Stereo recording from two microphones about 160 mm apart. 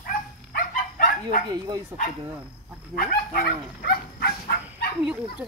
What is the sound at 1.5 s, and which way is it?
Speech, 25° right (ahead or behind).